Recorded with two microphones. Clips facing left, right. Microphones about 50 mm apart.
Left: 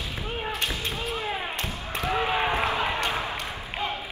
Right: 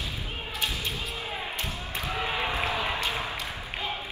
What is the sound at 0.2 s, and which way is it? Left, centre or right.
Basketball bounce, left.